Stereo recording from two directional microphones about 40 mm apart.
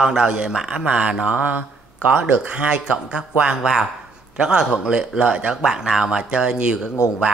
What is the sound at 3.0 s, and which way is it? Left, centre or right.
Speech, right.